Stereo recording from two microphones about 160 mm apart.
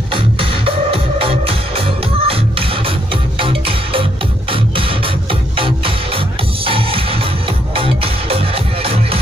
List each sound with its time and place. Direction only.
0.1 s music: 35° right (ahead or behind)